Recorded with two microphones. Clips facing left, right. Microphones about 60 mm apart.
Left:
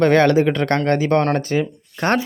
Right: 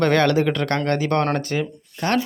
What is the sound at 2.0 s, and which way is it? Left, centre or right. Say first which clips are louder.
Speech: left 3 dB; left.